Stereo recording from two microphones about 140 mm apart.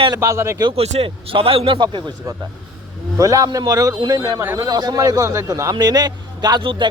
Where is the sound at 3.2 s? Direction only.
25° right (ahead or behind).